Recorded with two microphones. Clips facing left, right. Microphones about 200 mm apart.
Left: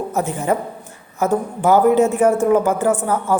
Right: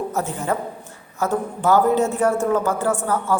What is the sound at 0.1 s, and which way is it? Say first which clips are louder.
A woman's voice: left 4 dB; 15° left (ahead or behind).